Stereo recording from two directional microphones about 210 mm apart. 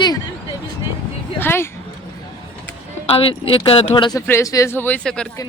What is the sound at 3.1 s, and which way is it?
Speech, 25° left (ahead or behind).